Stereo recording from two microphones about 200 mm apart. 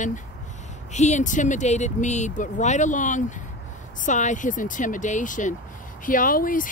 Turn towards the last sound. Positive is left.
turn(degrees=45)  # may be behind; listen again after turning